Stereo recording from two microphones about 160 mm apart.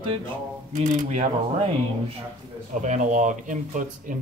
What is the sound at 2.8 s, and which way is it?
Speech, 50° right (ahead or behind).